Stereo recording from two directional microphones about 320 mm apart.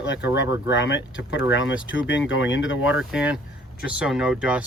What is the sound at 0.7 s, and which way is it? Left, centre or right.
Speech, left.